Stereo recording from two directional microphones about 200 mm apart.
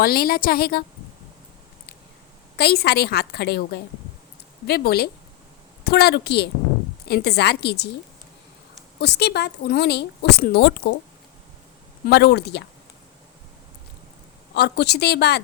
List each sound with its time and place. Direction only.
0.0 s a woman's voice: 50° left (ahead or behind)
2.6 s a woman's voice: 55° left (ahead or behind)
9.0 s speech: 55° left (ahead or behind)
12.0 s speech: 55° left (ahead or behind)
14.5 s speech: 55° left (ahead or behind)